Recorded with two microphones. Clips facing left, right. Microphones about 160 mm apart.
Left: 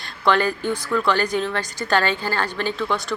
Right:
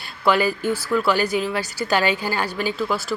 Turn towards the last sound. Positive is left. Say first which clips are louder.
# even
turn(degrees=-5)  # may be behind; listen again after turning